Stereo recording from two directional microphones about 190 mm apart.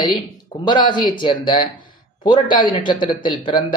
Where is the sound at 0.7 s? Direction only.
25° left (ahead or behind).